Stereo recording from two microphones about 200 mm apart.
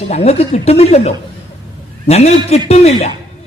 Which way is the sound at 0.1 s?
30° left (ahead or behind).